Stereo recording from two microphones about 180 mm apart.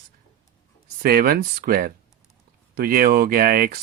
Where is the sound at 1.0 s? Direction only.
55° right (ahead or behind).